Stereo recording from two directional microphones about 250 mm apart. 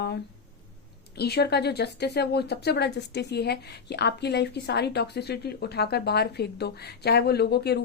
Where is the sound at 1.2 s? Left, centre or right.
Left.